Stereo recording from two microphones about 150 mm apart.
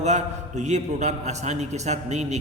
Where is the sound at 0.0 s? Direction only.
50° right (ahead or behind).